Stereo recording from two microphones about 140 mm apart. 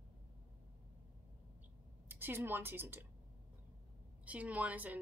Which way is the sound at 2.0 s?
15° right (ahead or behind).